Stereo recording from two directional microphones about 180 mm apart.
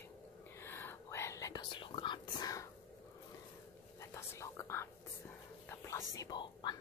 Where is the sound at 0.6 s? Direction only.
10° left (ahead or behind).